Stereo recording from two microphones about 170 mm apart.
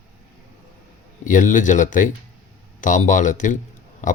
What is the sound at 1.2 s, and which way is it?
Speech, 50° left (ahead or behind).